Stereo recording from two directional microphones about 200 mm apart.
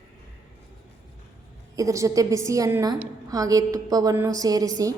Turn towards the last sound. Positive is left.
turn(degrees=-15)  # may be behind; listen again after turning